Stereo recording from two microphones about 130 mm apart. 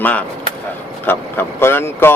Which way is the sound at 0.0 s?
10° left (ahead or behind).